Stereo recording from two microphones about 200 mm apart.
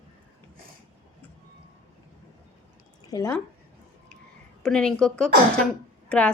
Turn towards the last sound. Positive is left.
turn(degrees=5)  # may be behind; listen again after turning